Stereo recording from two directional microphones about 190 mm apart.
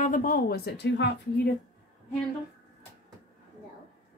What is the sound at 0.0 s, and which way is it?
Speech, 45° left (ahead or behind).